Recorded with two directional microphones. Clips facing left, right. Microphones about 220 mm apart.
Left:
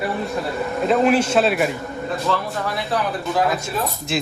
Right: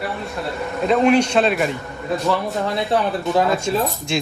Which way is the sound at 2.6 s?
25° right (ahead or behind).